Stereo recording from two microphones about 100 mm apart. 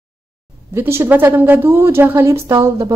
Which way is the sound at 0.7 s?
25° right (ahead or behind).